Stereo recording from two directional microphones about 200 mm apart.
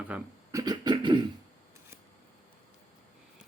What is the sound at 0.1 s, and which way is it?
Beatboxing, 15° right (ahead or behind).